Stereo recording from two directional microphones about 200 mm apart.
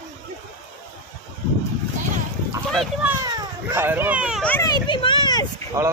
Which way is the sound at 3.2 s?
15° right (ahead or behind).